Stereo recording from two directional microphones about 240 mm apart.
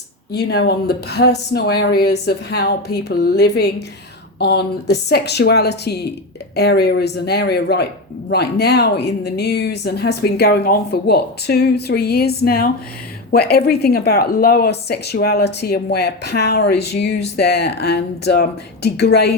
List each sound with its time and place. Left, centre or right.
0.3 s speech: left